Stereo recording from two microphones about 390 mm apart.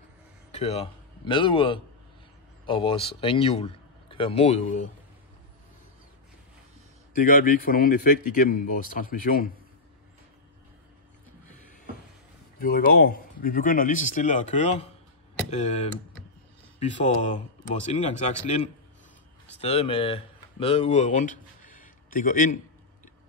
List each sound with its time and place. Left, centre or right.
0.5 s a man's voice: centre
7.2 s speech: left
12.5 s speech: left